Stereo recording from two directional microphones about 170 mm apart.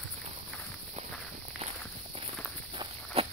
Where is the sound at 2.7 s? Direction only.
35° right (ahead or behind).